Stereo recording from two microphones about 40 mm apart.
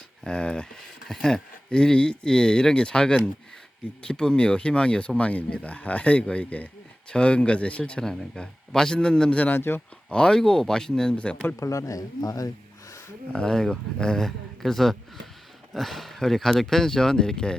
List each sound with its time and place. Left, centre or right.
0.3 s speech: left
1.0 s speech: centre; by 8.0 s left
8.4 s speech: centre
9.6 s speech: left
10.1 s speech: left
13.3 s speech: centre